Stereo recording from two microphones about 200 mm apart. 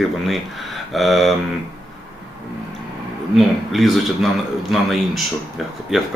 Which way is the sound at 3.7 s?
Centre (ahead or behind).